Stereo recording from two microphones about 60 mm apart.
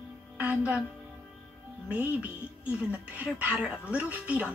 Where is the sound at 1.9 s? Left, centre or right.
Right.